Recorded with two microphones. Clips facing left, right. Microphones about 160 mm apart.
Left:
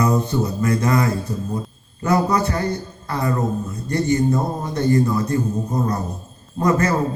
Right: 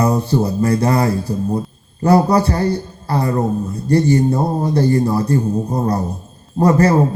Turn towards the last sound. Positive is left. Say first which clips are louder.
# right 5 dB
turn(degrees=-35)  # may be behind; listen again after turning